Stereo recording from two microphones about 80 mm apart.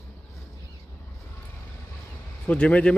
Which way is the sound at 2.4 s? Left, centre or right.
Centre.